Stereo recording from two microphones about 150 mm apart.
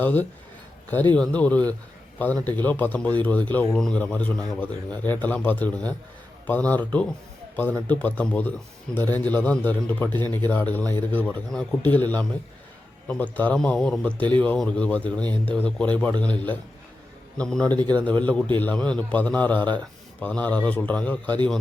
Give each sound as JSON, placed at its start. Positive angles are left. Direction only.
{"t": 0.0, "sound": "speech", "side_deg": 10}
{"t": 10.1, "sound": "speech", "side_deg": -30}
{"t": 10.5, "sound": "speech", "side_deg": 10}